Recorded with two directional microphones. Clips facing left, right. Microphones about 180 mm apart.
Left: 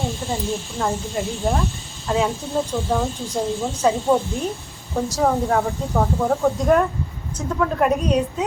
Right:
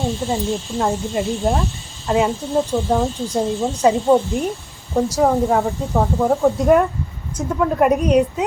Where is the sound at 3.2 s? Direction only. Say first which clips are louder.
Right 3 dB; 10° right (ahead or behind).